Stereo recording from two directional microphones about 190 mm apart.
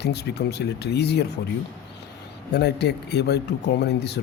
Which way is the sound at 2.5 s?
60° left (ahead or behind).